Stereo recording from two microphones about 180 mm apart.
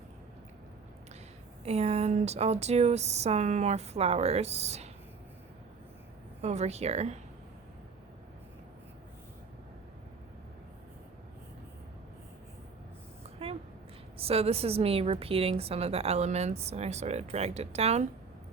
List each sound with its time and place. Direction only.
1.6 s a woman's voice: 35° right (ahead or behind)
6.4 s a woman's voice: 40° right (ahead or behind)
14.2 s a woman's voice: 35° right (ahead or behind)